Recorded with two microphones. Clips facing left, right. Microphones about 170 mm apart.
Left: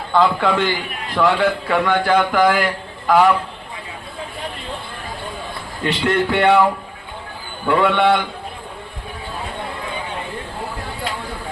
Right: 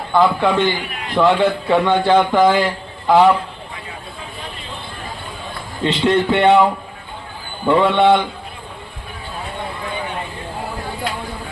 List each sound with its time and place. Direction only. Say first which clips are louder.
0.1 s a man's voice: right 1 dB; 15° right (ahead or behind)
5.8 s a man's voice: right 3 dB; 20° right (ahead or behind)
7.7 s a man's voice: right 2 dB; 20° right (ahead or behind)